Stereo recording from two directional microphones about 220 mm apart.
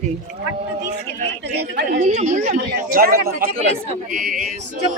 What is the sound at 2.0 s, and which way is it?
Speech, 35° right (ahead or behind).